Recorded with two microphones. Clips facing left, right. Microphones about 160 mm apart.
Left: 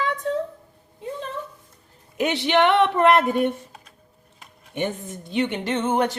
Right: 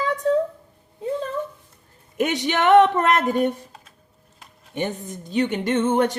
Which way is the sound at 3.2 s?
40° right (ahead or behind).